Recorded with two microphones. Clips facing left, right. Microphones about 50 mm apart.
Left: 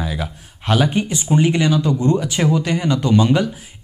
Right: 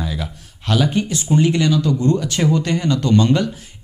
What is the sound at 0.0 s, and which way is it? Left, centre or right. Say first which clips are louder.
Speech: left 1 dB; centre.